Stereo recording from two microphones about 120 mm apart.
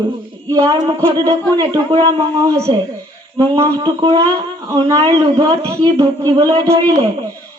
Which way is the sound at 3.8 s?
40° right (ahead or behind).